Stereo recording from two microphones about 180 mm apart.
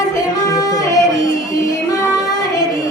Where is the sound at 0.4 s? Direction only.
20° left (ahead or behind).